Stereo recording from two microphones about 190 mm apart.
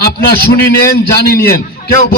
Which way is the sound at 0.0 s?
55° left (ahead or behind).